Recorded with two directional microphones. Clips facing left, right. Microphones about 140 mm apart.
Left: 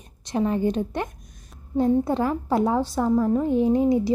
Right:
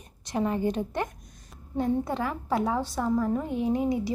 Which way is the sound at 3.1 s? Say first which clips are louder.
Left 5 dB; 15° left (ahead or behind).